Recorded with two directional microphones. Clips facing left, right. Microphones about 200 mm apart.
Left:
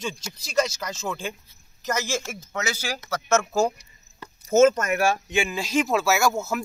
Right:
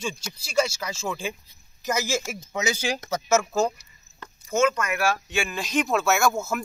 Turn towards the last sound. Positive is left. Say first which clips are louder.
# even
turn(degrees=0)  # may be behind; listen again after turning